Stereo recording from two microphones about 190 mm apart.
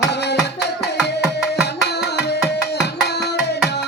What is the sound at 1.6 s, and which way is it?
Tabla, 60° left (ahead or behind).